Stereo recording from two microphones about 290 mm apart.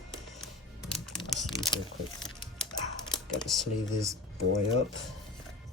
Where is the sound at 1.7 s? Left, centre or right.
Centre.